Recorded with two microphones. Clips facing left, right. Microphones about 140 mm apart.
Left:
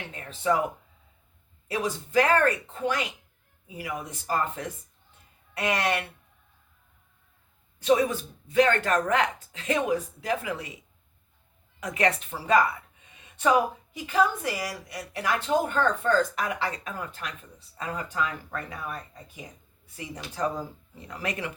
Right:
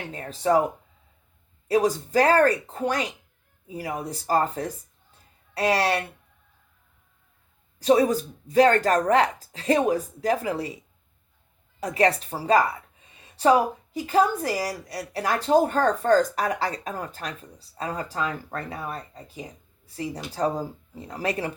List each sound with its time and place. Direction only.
0.1 s speech: 35° right (ahead or behind)
1.6 s speech: 35° right (ahead or behind)
7.8 s speech: 35° right (ahead or behind)
11.8 s speech: 35° right (ahead or behind)